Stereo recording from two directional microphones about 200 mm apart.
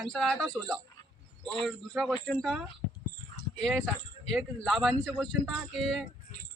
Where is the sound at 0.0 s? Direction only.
Centre (ahead or behind).